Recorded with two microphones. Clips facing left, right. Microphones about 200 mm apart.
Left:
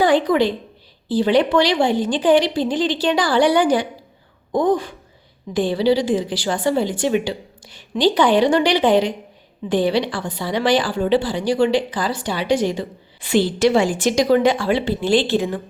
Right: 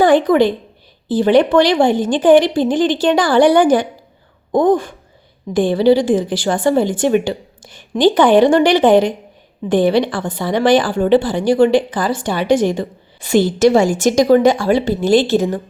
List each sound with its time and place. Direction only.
0.0 s a woman's voice: 50° right (ahead or behind)